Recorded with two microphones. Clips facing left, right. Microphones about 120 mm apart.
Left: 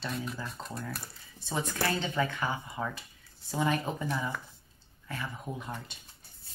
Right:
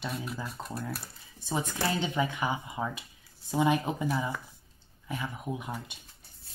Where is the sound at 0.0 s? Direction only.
10° right (ahead or behind).